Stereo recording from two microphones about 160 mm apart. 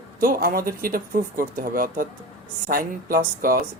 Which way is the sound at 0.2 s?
60° right (ahead or behind).